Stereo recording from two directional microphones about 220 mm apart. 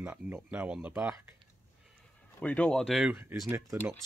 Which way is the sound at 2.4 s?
5° left (ahead or behind).